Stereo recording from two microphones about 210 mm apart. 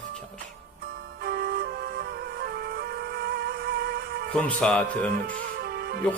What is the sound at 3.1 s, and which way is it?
Music, 50° right (ahead or behind).